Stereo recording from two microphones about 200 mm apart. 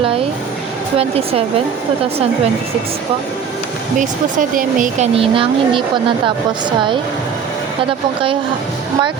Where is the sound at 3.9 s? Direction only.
40° right (ahead or behind).